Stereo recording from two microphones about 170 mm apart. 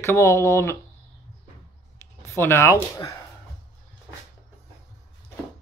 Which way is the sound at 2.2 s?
15° left (ahead or behind).